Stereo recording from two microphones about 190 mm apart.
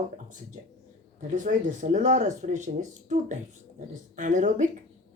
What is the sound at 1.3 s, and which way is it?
Speech, 45° right (ahead or behind).